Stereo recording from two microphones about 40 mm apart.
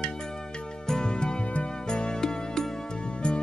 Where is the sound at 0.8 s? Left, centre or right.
Centre.